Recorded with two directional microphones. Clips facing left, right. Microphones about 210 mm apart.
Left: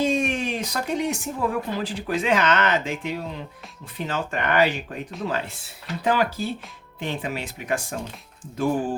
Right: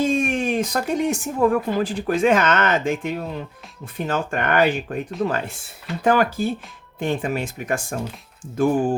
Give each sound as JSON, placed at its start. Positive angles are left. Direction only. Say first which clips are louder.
{"t": 0.0, "sound": "speech", "louder": "right 3 dB", "side_deg": -50}